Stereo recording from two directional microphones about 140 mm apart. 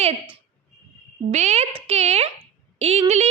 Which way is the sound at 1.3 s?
55° right (ahead or behind).